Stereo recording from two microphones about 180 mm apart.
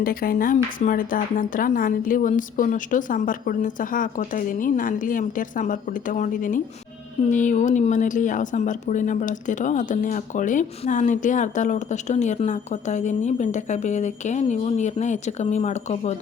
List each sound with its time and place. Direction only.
0.0 s speech: 55° left (ahead or behind); by 16.1 s 40° left (ahead or behind)